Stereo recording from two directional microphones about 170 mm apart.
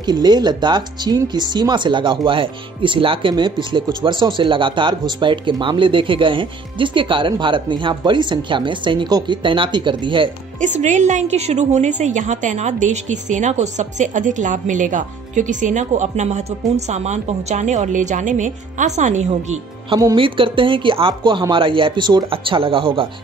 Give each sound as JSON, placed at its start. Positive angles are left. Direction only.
{"t": 0.0, "sound": "speech", "side_deg": -25}
{"t": 10.6, "sound": "a woman's voice", "side_deg": -45}
{"t": 20.2, "sound": "speech", "side_deg": -30}